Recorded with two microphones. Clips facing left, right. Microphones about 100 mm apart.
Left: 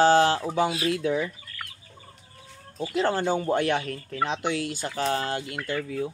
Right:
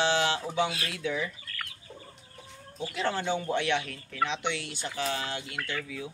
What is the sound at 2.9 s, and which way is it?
Speech, 40° left (ahead or behind).